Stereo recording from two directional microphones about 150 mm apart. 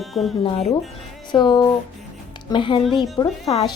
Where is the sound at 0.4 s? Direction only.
40° left (ahead or behind).